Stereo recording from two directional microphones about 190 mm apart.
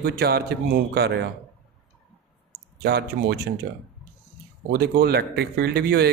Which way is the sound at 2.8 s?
55° right (ahead or behind).